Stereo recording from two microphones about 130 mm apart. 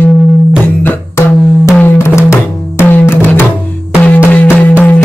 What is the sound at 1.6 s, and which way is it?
Music, 15° left (ahead or behind).